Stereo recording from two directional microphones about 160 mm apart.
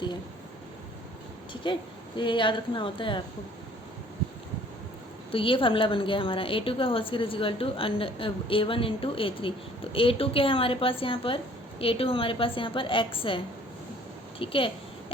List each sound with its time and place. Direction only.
2.1 s a woman's voice: 30° left (ahead or behind)
5.3 s a woman's voice: 35° left (ahead or behind)